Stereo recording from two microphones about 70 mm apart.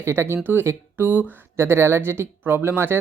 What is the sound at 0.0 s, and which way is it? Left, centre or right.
Speech, right.